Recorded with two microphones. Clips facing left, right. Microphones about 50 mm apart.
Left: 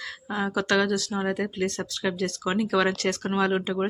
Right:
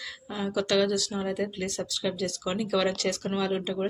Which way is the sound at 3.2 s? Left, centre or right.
Left.